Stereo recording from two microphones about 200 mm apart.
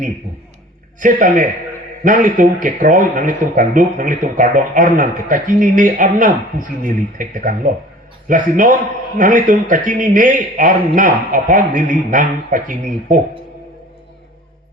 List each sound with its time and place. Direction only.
0.9 s speech: 40° right (ahead or behind)